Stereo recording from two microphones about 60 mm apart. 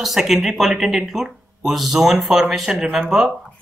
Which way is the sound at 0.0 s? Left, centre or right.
Centre.